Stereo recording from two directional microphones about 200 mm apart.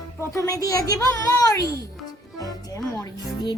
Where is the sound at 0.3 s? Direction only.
15° left (ahead or behind).